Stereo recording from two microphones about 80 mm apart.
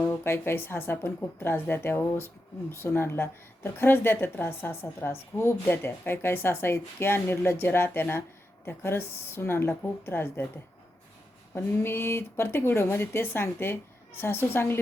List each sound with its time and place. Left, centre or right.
0.0 s speech: left
11.5 s speech: left